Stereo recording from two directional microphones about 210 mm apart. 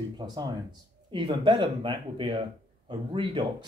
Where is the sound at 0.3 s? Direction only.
20° right (ahead or behind).